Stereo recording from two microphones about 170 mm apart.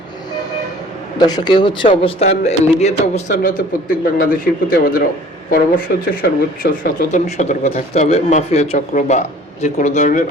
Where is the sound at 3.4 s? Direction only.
55° left (ahead or behind).